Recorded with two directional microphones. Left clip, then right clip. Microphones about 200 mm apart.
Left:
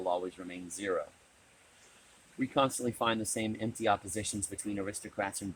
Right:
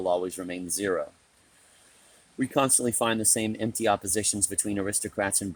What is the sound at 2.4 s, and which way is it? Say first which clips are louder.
Speech: right 5 dB; 60° right (ahead or behind).